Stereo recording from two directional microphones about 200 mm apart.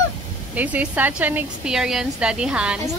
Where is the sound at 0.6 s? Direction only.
10° right (ahead or behind).